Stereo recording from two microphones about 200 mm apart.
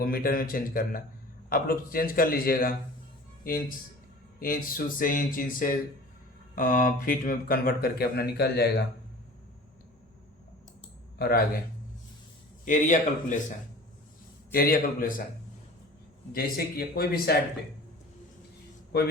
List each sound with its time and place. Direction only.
0.0 s speech: 45° left (ahead or behind)
11.2 s speech: 50° left (ahead or behind)
12.6 s speech: 40° left (ahead or behind)
14.5 s speech: 45° left (ahead or behind)
16.3 s speech: 50° left (ahead or behind)